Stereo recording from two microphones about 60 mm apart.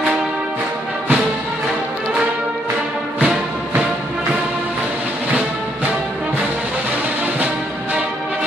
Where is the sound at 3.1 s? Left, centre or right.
Centre.